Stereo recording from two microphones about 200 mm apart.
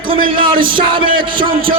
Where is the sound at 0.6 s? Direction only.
25° right (ahead or behind).